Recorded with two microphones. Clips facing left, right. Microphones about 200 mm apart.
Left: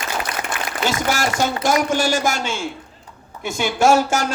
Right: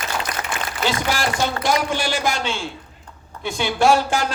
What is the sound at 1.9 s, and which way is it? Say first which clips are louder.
A man's voice: left 3 dB; 45° left (ahead or behind).